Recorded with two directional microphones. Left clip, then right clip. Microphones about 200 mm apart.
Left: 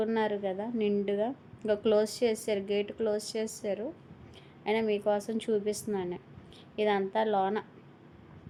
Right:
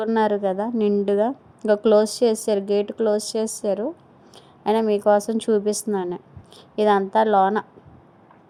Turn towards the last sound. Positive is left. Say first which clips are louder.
# right 11 dB
turn(degrees=-40)  # may be behind; listen again after turning